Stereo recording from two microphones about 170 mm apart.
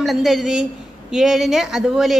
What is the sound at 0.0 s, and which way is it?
A woman's voice, centre (ahead or behind).